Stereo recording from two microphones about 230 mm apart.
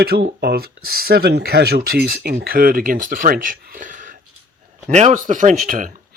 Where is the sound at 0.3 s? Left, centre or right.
Right.